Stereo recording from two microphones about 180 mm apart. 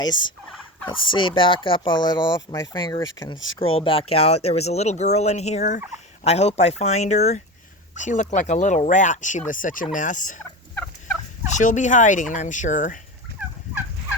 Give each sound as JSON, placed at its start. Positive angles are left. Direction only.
{"t": 0.0, "sound": "speech", "side_deg": 25}
{"t": 3.3, "sound": "speech", "side_deg": 90}
{"t": 3.6, "sound": "speech", "side_deg": 30}
{"t": 11.5, "sound": "speech", "side_deg": 45}